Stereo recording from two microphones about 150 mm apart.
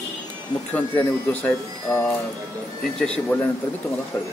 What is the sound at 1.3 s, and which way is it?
Speech, 10° left (ahead or behind).